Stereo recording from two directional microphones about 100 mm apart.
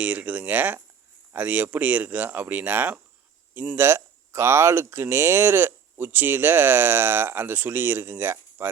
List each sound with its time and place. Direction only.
0.0 s speech: 15° right (ahead or behind)